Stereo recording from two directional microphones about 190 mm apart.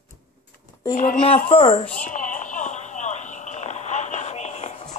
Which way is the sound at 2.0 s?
40° left (ahead or behind).